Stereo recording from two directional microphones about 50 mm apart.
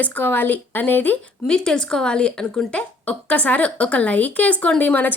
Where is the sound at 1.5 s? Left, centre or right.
Centre.